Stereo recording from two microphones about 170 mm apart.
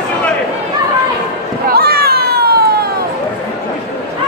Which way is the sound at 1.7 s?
65° right (ahead or behind).